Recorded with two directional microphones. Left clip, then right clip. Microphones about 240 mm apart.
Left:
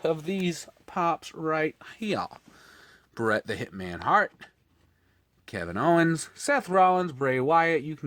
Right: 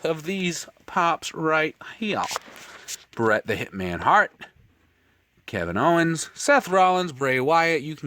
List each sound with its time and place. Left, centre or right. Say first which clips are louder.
0.0 s speech: right 2 dB; right